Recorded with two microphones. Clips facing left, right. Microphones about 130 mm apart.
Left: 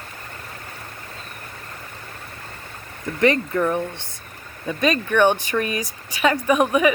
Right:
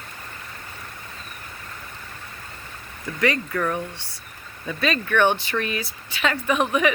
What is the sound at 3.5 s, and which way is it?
Speech, 15° left (ahead or behind).